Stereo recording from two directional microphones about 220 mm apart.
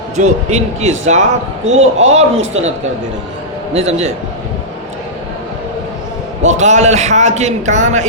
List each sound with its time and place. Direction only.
0.5 s a man's voice: 30° right (ahead or behind)
3.8 s a man's voice: 30° right (ahead or behind)
6.4 s a man's voice: 30° right (ahead or behind)